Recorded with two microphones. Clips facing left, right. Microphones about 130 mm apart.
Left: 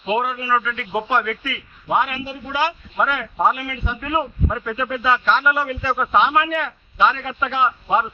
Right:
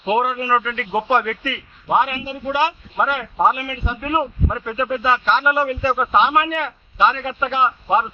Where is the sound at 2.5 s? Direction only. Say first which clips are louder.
Right 3 dB; 20° right (ahead or behind).